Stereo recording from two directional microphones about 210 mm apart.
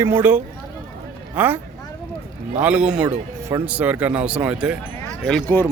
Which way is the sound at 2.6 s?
5° right (ahead or behind).